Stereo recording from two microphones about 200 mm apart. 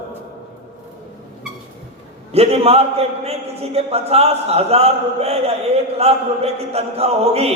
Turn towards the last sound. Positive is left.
turn(degrees=-30)  # may be behind; listen again after turning